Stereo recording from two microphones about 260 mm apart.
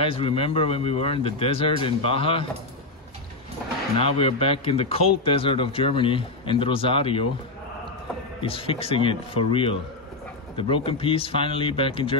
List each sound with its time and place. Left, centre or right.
0.0 s speech: left
4.0 s speech: left
8.4 s speech: left